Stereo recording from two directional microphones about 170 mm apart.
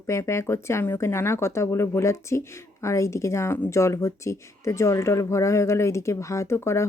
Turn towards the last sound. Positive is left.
turn(degrees=15)  # may be behind; listen again after turning